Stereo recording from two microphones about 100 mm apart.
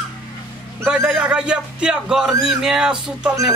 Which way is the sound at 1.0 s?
10° right (ahead or behind).